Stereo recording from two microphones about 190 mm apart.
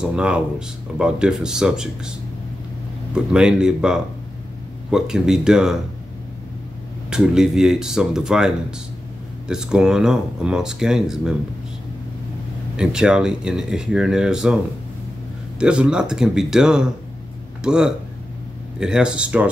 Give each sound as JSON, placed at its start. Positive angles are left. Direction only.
{"t": 0.0, "sound": "speech", "side_deg": -5}
{"t": 3.3, "sound": "speech", "side_deg": -5}
{"t": 7.1, "sound": "speech", "side_deg": -5}
{"t": 12.7, "sound": "speech", "side_deg": -5}
{"t": 15.6, "sound": "speech", "side_deg": -5}